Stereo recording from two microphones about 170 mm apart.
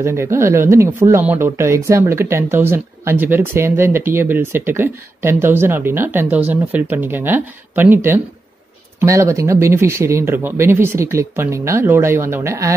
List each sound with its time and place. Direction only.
0.0 s speech: 15° right (ahead or behind)